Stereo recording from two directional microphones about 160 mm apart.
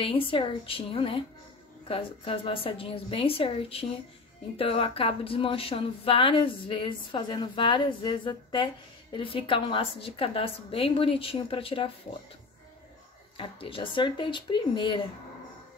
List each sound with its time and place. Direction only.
0.0 s speech: 35° left (ahead or behind)
13.4 s speech: 35° left (ahead or behind)